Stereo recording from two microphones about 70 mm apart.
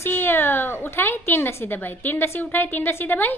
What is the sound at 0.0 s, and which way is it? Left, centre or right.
A woman's voice, left.